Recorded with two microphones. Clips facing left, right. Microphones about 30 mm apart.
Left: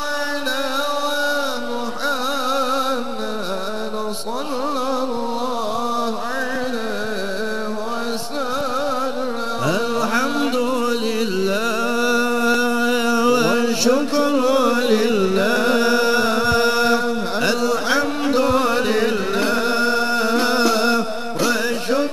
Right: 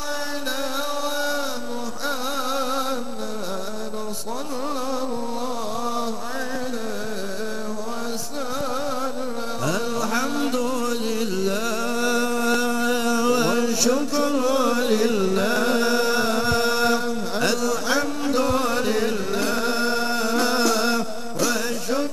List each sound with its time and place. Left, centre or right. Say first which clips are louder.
2.0 s music: left 5 dB; left
9.7 s music: left 4 dB; left
12.5 s a sound: left 4 dB; left